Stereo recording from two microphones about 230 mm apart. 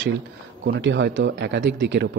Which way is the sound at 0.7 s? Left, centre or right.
Right.